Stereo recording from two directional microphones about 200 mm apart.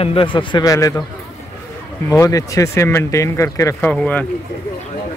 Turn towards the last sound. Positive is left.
turn(degrees=5)  # may be behind; listen again after turning